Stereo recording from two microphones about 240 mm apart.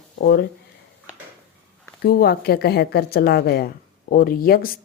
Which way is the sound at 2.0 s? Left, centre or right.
Left.